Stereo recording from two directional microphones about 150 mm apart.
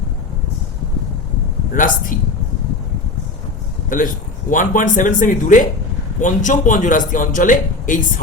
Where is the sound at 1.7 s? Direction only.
65° left (ahead or behind).